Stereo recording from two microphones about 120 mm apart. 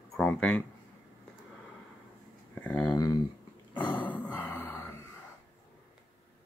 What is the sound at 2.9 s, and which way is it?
Speech, 30° left (ahead or behind).